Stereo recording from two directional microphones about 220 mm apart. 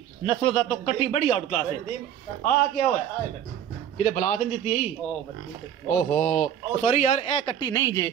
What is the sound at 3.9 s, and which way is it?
Speech, 35° left (ahead or behind).